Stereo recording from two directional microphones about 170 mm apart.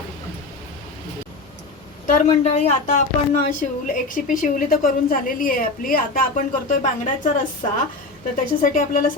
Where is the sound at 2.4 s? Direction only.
45° left (ahead or behind).